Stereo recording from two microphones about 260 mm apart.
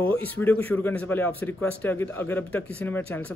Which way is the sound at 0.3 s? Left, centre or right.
Centre.